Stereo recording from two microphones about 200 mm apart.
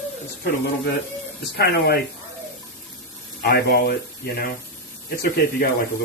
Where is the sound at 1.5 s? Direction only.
55° left (ahead or behind).